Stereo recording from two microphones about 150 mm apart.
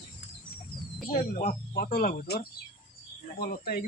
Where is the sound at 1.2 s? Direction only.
55° left (ahead or behind).